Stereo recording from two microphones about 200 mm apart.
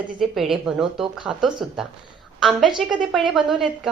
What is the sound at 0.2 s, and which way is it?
A woman's voice, centre (ahead or behind).